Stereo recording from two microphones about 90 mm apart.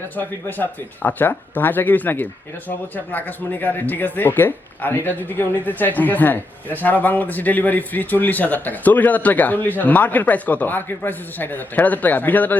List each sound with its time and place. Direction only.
0.2 s speech: 20° left (ahead or behind)